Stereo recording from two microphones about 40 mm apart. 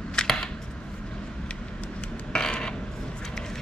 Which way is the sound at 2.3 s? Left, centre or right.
Centre.